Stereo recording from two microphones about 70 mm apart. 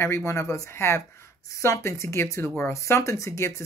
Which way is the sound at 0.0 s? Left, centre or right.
Left.